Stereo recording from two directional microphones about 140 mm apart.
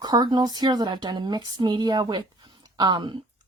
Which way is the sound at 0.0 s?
30° right (ahead or behind).